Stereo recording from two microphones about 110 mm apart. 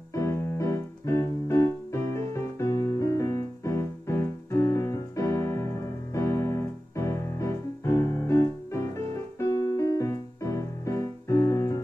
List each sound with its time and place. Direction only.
0.1 s music: 25° left (ahead or behind)
6.1 s keyboard: 25° left (ahead or behind)
9.4 s music: 30° left (ahead or behind)